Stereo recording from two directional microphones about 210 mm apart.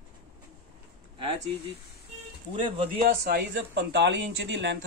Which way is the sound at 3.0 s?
50° right (ahead or behind).